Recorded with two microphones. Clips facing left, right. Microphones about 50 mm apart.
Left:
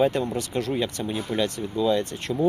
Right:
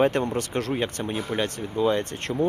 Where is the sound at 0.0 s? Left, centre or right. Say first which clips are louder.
Right 1 dB; right.